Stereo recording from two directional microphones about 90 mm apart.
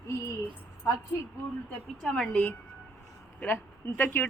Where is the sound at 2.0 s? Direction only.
5° left (ahead or behind).